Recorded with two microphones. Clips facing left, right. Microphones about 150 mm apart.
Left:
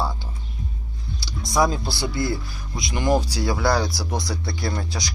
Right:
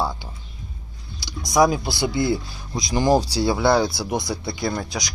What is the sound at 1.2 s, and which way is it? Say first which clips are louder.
Speech: right 3 dB; 15° right (ahead or behind).